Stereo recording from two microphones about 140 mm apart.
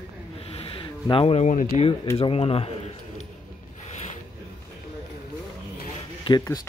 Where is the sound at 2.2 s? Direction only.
45° left (ahead or behind).